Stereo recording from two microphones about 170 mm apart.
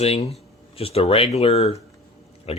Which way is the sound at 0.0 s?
35° left (ahead or behind).